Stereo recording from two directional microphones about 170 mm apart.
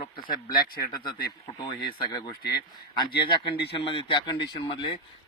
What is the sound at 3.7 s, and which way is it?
Speech, 30° left (ahead or behind).